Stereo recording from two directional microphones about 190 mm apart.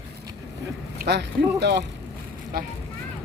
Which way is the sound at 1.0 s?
60° right (ahead or behind).